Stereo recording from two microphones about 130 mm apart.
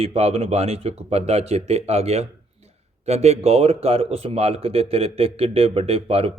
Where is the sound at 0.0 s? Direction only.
50° right (ahead or behind).